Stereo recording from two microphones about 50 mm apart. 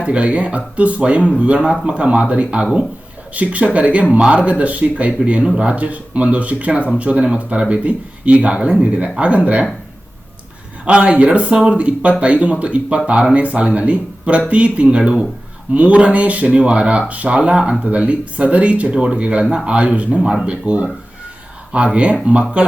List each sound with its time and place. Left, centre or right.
0.0 s speech: right
10.8 s speech: right